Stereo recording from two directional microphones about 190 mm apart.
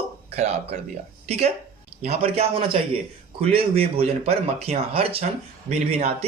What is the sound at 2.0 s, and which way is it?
A man's voice, 35° right (ahead or behind).